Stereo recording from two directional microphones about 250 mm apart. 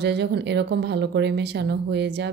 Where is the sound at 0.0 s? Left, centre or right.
Right.